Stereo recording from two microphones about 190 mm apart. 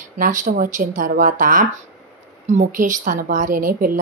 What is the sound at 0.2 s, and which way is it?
A woman's voice, 45° right (ahead or behind).